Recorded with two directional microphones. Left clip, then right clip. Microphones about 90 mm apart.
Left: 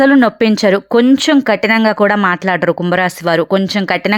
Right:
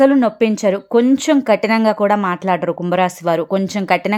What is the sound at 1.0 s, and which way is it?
Speech, 20° left (ahead or behind).